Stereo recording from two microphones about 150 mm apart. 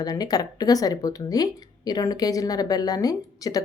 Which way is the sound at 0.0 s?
25° left (ahead or behind).